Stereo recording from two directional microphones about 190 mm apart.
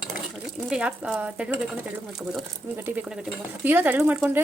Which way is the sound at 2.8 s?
10° right (ahead or behind).